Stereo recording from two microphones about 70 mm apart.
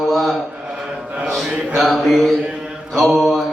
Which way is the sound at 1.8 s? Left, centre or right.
Centre.